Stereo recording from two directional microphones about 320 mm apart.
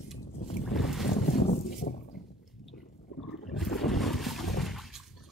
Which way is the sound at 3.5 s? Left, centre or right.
Centre.